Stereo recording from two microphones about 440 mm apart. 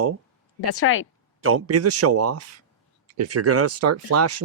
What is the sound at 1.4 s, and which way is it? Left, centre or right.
Speech, right.